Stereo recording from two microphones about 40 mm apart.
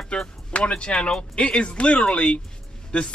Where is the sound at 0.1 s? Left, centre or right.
Left.